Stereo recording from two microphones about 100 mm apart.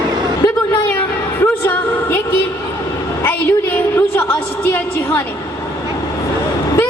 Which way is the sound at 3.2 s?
20° left (ahead or behind).